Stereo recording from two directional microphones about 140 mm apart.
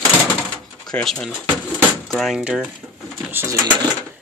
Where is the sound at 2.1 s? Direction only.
5° right (ahead or behind).